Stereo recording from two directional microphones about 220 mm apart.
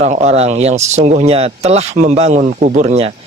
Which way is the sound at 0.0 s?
30° right (ahead or behind).